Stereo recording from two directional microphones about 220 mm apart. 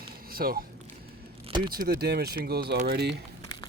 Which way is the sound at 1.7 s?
45° right (ahead or behind).